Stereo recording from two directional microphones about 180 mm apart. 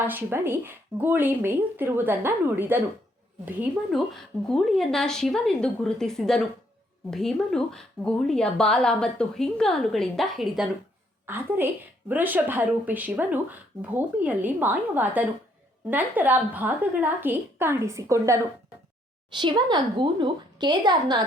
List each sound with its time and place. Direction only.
0.0 s speech: 10° right (ahead or behind)
4.1 s a woman's voice: centre (ahead or behind); by 21.2 s 25° right (ahead or behind)